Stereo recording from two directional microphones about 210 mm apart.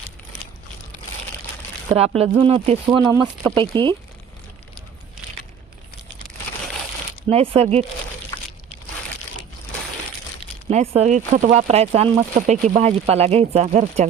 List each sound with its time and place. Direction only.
1.9 s speech: 30° right (ahead or behind)
7.3 s speech: 25° right (ahead or behind)
10.7 s speech: 30° right (ahead or behind)